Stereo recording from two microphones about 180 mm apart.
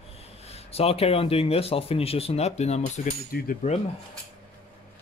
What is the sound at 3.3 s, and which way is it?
Speech, 55° left (ahead or behind).